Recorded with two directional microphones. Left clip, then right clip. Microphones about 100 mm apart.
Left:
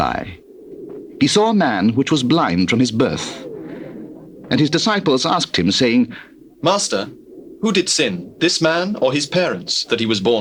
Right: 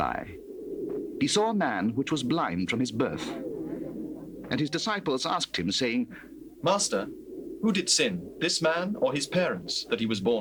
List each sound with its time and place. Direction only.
0.0 s speech: 40° left (ahead or behind)
1.2 s speech: 30° left (ahead or behind)
2.6 s speech: 25° left (ahead or behind)